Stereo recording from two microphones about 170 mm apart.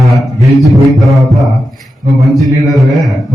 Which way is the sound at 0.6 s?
Centre (ahead or behind).